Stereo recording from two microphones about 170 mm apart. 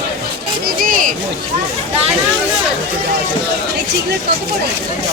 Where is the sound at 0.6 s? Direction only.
55° right (ahead or behind).